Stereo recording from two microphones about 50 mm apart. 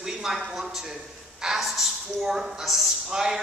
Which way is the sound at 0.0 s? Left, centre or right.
Centre.